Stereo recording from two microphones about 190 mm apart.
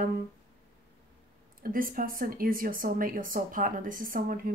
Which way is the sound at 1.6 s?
50° right (ahead or behind).